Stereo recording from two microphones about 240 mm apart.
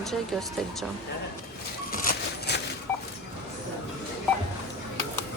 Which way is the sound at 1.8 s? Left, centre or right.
Left.